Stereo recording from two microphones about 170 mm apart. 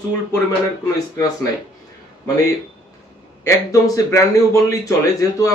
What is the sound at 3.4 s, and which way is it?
A man's voice, 20° left (ahead or behind).